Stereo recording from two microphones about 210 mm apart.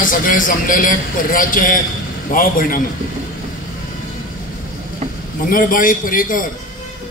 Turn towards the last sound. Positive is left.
turn(degrees=40)  # may be behind; listen again after turning